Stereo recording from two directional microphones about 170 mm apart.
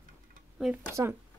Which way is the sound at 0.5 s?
5° right (ahead or behind).